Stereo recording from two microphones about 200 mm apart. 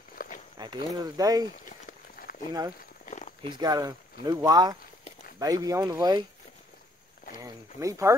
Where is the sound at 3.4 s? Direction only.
20° right (ahead or behind).